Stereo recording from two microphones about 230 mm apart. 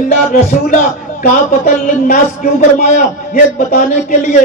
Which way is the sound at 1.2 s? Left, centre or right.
Left.